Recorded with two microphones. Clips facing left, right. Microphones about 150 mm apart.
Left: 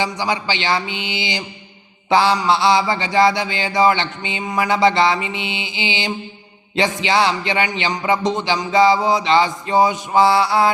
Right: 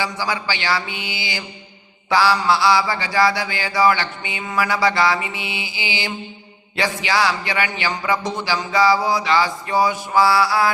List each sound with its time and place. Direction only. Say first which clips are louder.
0.0 s mantra: left 3 dB; 20° left (ahead or behind)